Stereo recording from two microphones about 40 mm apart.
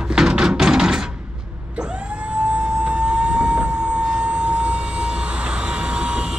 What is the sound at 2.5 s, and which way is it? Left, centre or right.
Siren, right.